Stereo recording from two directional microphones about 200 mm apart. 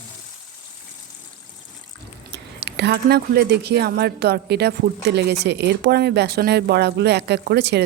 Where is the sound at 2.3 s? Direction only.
60° right (ahead or behind).